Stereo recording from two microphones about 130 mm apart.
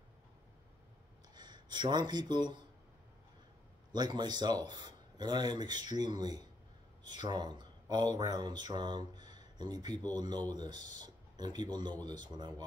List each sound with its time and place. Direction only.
1.3 s speech: 35° right (ahead or behind)
3.9 s speech: 35° right (ahead or behind)